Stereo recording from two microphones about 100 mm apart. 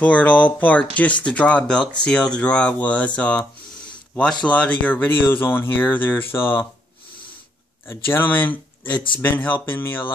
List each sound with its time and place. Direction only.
0.0 s speech: 15° left (ahead or behind)
7.9 s speech: 20° left (ahead or behind)
8.9 s speech: 55° left (ahead or behind)
9.2 s speech: 20° left (ahead or behind)